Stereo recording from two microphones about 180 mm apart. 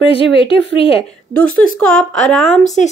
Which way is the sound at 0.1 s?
30° left (ahead or behind).